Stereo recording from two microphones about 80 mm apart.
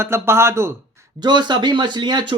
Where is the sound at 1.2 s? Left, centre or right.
Right.